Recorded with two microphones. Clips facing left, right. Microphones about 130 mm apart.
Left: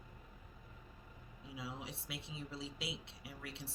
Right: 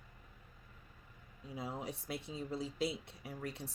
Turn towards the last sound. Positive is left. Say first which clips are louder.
# right 6 dB
turn(degrees=-45)  # may be behind; listen again after turning